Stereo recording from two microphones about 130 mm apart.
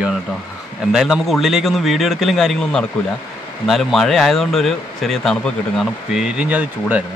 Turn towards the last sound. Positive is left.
turn(degrees=-10)  # may be behind; listen again after turning